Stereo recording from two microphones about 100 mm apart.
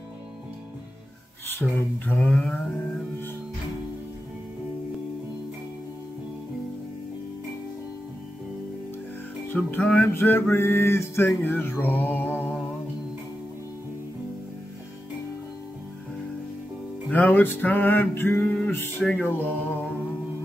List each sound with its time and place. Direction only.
1.6 s a sound: 10° left (ahead or behind)
9.5 s music: 5° left (ahead or behind)
10.0 s mantra: 20° left (ahead or behind)
17.1 s mantra: 20° left (ahead or behind)